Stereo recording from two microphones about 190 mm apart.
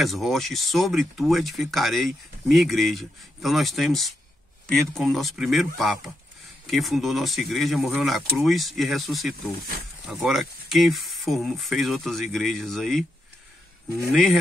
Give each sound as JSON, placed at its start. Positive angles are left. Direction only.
{"t": 0.0, "sound": "speech", "side_deg": 0}
{"t": 6.7, "sound": "speech", "side_deg": 0}
{"t": 14.1, "sound": "speech", "side_deg": 0}